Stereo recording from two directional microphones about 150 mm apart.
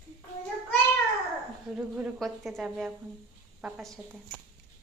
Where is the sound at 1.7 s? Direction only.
5° right (ahead or behind).